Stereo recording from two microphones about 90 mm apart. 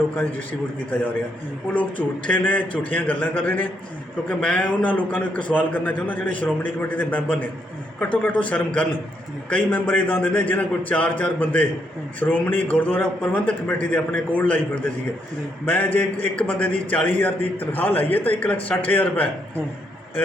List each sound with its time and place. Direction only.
1.7 s a man's voice: 20° left (ahead or behind)
15.6 s a man's voice: 20° left (ahead or behind)